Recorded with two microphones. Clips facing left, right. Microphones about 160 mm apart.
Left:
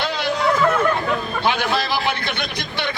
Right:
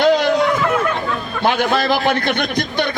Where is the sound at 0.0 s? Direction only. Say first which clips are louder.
Right 9 dB; 50° right (ahead or behind).